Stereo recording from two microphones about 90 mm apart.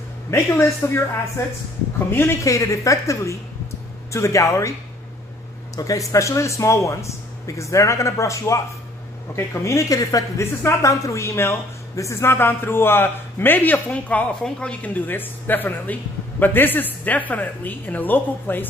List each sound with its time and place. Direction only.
0.3 s a woman's voice: 30° left (ahead or behind)
2.4 s speech: 35° left (ahead or behind)
5.8 s a woman's voice: 40° left (ahead or behind); by 18.7 s 20° left (ahead or behind)